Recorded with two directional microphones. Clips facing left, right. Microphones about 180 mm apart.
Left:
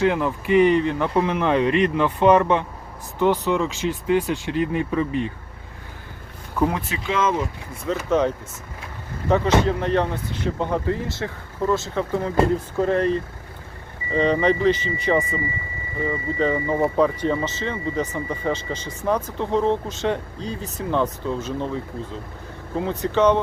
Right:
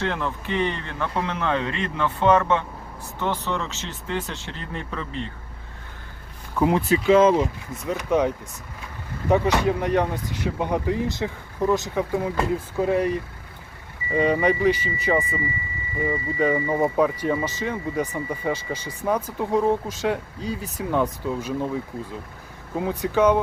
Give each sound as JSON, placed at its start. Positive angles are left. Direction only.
{"t": 0.0, "sound": "speech", "side_deg": 10}
{"t": 6.7, "sound": "speech", "side_deg": -30}
{"t": 7.9, "sound": "speech", "side_deg": -10}
{"t": 9.3, "sound": "speech", "side_deg": -15}